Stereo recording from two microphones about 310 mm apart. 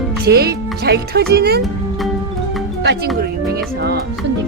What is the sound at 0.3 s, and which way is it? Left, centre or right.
Speech, right.